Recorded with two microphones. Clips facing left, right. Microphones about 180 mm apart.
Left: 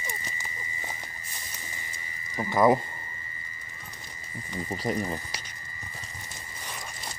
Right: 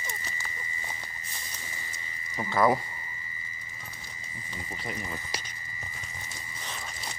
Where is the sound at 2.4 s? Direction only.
15° left (ahead or behind).